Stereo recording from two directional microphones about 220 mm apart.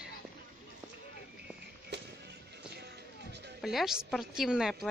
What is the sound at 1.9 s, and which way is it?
Music, 50° right (ahead or behind).